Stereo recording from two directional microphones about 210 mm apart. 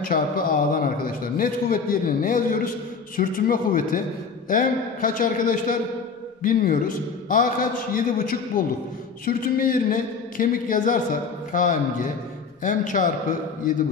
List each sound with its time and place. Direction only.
0.0 s a man's voice: 45° left (ahead or behind)